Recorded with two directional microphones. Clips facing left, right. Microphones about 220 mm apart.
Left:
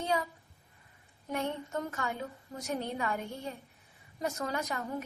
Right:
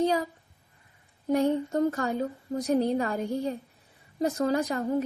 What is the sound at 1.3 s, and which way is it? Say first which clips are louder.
A woman's voice: right 10 dB; 35° right (ahead or behind).